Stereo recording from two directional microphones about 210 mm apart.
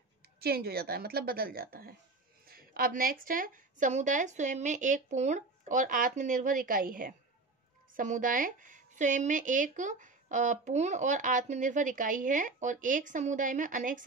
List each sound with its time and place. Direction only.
0.4 s a woman's voice: 50° right (ahead or behind)